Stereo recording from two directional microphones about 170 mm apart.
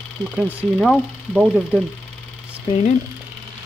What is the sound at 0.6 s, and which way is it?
Speech, centre (ahead or behind).